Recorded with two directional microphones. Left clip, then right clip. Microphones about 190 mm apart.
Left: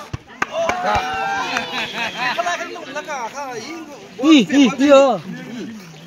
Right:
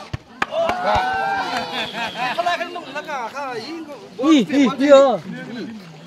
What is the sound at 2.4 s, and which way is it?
Speech, 15° left (ahead or behind).